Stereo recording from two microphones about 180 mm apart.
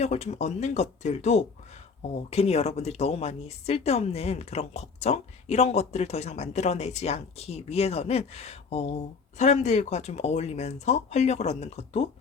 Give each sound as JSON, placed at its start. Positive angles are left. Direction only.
{"t": 0.0, "sound": "speech", "side_deg": 40}